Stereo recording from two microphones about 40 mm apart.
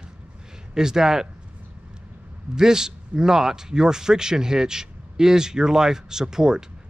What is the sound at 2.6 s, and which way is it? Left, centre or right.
Speech, centre.